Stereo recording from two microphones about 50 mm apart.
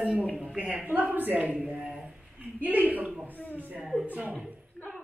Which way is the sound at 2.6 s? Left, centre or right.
Right.